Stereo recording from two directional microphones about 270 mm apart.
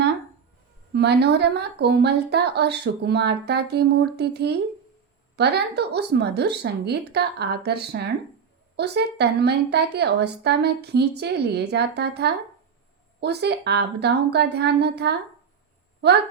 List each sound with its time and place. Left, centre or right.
0.9 s a woman's voice: right